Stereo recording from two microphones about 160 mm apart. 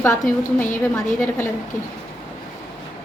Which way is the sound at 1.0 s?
10° left (ahead or behind).